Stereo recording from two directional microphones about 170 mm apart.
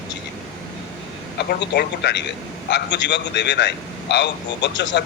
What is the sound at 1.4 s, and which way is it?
Speech, 80° left.